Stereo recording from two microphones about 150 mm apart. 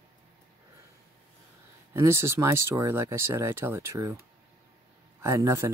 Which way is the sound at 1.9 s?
15° right (ahead or behind).